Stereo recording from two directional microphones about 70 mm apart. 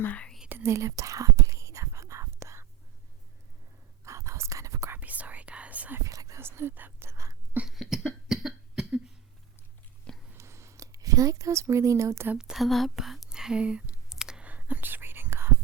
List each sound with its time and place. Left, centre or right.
0.0 s speech: left
0.6 s whispering: right
4.0 s whispering: right
4.9 s whispering: right
6.0 s whispering: right
6.4 s whispering: right
7.1 s whispering: right
7.7 s cough: centre
10.3 s a sound: right
12.4 s speech: centre
12.6 s speech: centre
14.1 s clicking: centre
14.4 s whispering: right